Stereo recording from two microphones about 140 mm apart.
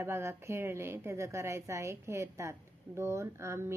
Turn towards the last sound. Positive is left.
turn(degrees=-20)  # may be behind; listen again after turning